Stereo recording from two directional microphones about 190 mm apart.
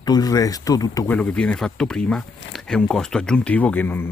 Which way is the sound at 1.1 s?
5° left (ahead or behind).